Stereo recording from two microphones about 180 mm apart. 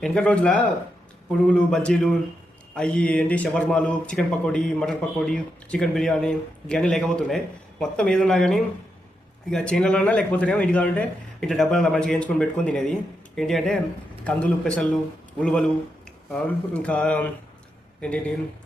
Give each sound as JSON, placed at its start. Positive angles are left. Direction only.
{"t": 0.0, "sound": "a man's voice", "side_deg": 5}